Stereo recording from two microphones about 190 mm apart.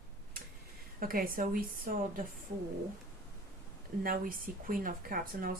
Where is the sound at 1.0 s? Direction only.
50° right (ahead or behind).